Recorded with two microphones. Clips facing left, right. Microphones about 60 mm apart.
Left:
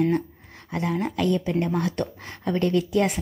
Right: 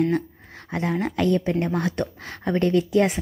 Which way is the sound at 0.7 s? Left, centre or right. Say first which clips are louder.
Right 1 dB; right.